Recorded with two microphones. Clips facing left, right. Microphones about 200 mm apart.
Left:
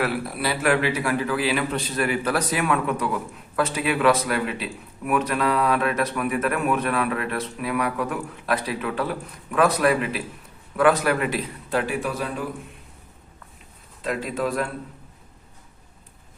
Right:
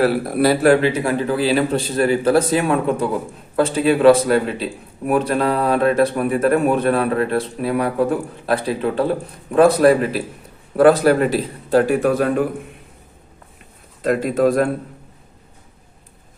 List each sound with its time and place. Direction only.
0.0 s speech: 40° right (ahead or behind)
14.0 s a man's voice: 50° right (ahead or behind)